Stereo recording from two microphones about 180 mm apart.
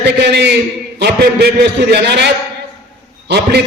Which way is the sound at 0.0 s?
70° right (ahead or behind).